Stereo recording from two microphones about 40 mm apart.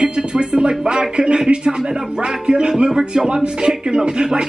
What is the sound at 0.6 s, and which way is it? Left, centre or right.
Speech, right.